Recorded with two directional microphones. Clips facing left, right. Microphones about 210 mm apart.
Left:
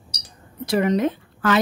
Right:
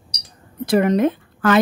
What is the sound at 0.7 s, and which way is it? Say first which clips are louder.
Speech: right 4 dB; 50° right (ahead or behind).